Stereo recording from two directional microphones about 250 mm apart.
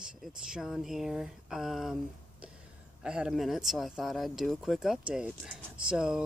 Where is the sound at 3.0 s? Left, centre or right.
Centre.